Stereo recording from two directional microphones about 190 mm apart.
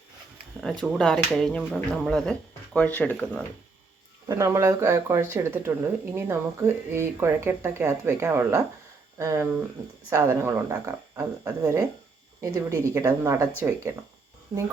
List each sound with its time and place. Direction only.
0.6 s speech: 5° left (ahead or behind)
4.3 s speech: 15° right (ahead or behind)